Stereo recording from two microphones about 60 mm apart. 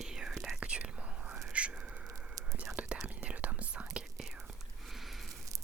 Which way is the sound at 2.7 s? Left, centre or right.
Right.